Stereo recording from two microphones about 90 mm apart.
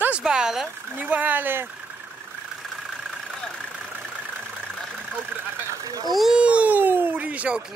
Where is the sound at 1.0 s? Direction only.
20° right (ahead or behind).